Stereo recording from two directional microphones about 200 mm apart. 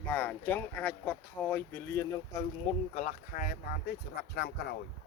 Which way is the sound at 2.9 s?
35° left (ahead or behind).